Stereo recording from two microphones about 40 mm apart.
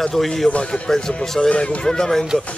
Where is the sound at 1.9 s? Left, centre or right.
Centre.